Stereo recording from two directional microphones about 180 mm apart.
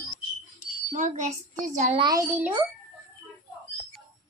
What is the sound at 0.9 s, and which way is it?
A woman's voice, 45° right (ahead or behind).